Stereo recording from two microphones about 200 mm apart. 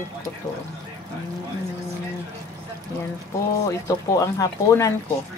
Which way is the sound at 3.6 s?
15° left (ahead or behind).